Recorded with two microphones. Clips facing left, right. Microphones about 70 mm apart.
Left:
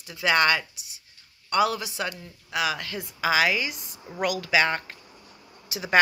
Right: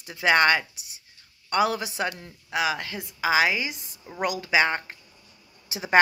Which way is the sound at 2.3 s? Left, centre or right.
Right.